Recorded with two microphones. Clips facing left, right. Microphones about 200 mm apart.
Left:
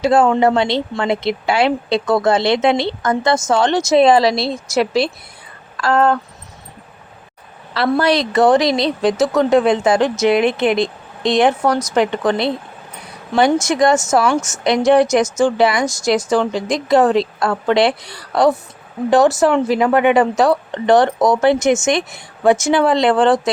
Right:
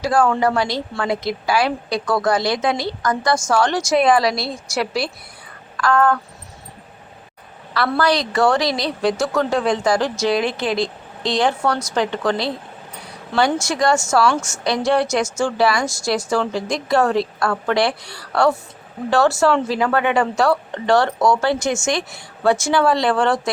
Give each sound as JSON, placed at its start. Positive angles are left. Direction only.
{"t": 0.0, "sound": "a woman's voice", "side_deg": 25}
{"t": 7.9, "sound": "a woman's voice", "side_deg": 20}